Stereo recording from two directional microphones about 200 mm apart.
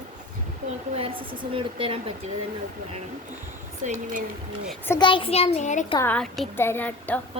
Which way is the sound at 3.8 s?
40° right (ahead or behind).